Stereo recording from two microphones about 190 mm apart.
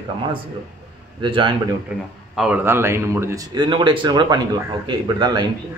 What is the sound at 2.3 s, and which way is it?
Speech, 5° right (ahead or behind).